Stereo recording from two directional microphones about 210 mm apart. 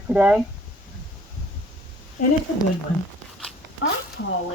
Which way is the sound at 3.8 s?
65° left (ahead or behind).